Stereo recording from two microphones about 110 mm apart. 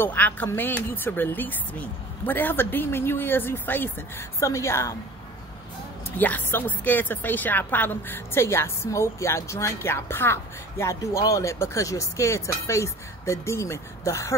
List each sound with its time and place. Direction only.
0.0 s a woman's voice: 15° left (ahead or behind)
6.1 s speech: 15° left (ahead or behind)